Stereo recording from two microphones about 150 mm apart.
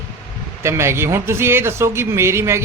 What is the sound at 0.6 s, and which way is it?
Speech, 20° right (ahead or behind).